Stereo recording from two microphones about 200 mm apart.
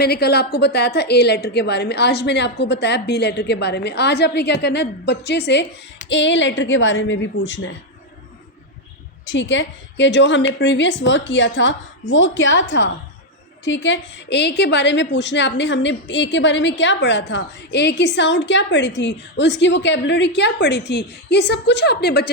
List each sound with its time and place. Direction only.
0.0 s a woman's voice: 50° left (ahead or behind); by 7.8 s 70° left (ahead or behind)
9.2 s a woman's voice: 65° left (ahead or behind)
13.7 s a woman's voice: 65° left (ahead or behind)